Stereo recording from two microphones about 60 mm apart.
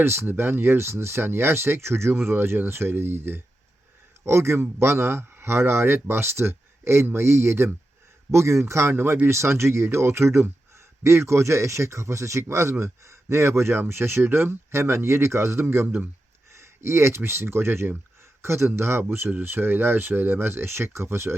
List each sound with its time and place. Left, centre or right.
0.0 s a man's voice: right